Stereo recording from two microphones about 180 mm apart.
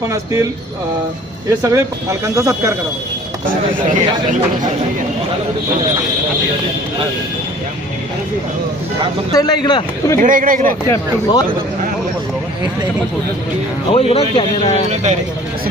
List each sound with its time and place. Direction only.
0.0 s speech: 15° right (ahead or behind)
1.5 s speech: 15° right (ahead or behind)
9.3 s speech: 20° left (ahead or behind)
10.2 s speech: 50° right (ahead or behind)
10.8 s speech: 20° left (ahead or behind)
13.9 s speech: 35° left (ahead or behind)
14.8 s speech: 40° right (ahead or behind)